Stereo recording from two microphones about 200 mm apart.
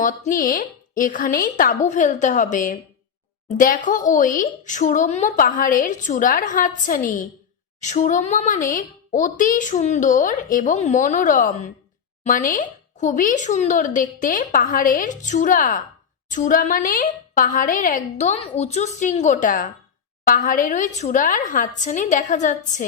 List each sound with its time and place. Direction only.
0.0 s a woman's voice: 40° left (ahead or behind)